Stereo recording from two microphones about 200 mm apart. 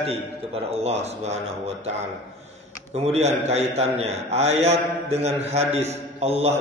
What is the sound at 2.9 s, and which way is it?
A man's voice, 30° right (ahead or behind).